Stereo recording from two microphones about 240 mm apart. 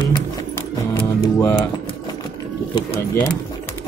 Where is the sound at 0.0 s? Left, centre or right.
Centre.